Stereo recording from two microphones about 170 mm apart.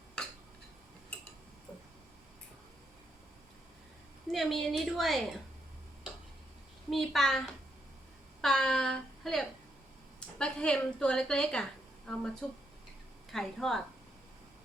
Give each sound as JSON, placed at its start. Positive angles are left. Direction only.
{"t": 4.3, "sound": "a woman's voice", "side_deg": 0}
{"t": 6.9, "sound": "a woman's voice", "side_deg": 0}